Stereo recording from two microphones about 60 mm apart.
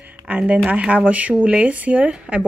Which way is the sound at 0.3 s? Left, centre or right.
Right.